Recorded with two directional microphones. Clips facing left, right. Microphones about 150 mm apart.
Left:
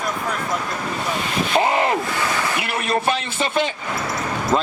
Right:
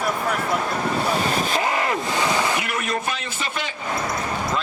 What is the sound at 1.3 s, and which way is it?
Speech, 40° right (ahead or behind).